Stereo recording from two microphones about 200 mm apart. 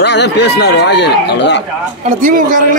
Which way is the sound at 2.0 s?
40° right (ahead or behind).